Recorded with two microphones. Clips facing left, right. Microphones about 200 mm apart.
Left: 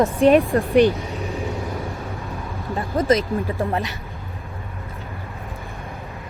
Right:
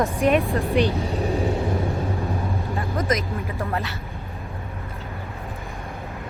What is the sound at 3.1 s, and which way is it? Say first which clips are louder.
Speech: left 6 dB; 30° left (ahead or behind).